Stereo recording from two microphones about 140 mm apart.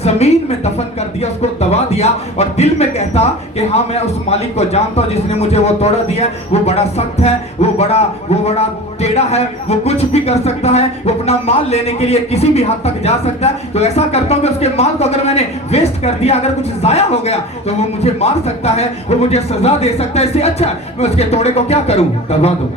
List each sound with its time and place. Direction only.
0.0 s speech: 50° left (ahead or behind)